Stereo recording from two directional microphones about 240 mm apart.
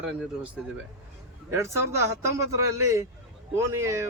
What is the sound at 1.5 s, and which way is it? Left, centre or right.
Speech, centre.